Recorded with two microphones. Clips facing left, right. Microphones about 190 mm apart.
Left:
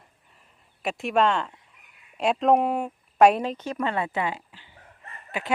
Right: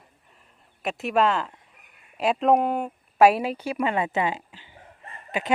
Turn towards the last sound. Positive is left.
turn(degrees=-20)  # may be behind; listen again after turning